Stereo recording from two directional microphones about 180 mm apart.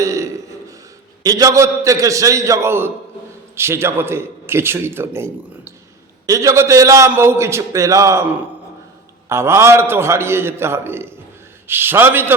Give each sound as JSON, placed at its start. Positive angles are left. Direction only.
{"t": 0.0, "sound": "a sound", "side_deg": -15}
{"t": 1.2, "sound": "a man's voice", "side_deg": -20}
{"t": 9.3, "sound": "a man's voice", "side_deg": -15}